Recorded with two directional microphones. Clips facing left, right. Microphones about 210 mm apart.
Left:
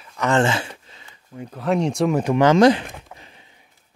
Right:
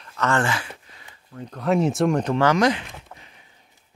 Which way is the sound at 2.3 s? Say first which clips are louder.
Left 8 dB; 25° left (ahead or behind).